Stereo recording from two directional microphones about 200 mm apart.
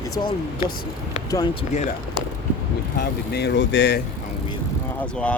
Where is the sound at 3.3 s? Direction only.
60° left (ahead or behind).